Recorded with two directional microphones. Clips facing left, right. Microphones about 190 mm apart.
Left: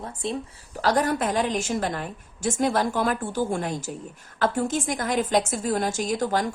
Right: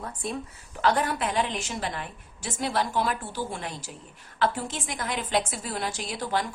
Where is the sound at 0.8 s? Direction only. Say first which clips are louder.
Left 3 dB; 40° left (ahead or behind).